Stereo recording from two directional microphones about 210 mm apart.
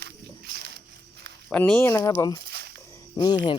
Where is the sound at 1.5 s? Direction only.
10° left (ahead or behind).